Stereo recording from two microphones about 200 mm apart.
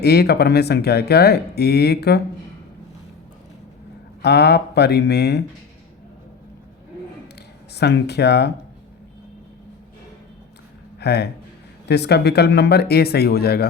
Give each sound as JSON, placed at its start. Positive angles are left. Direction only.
{"t": 0.0, "sound": "speech", "side_deg": 55}
{"t": 4.2, "sound": "speech", "side_deg": 55}
{"t": 7.8, "sound": "speech", "side_deg": 55}
{"t": 11.0, "sound": "speech", "side_deg": 55}